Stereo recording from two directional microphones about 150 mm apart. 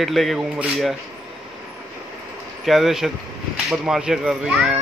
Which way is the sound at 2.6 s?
Centre (ahead or behind).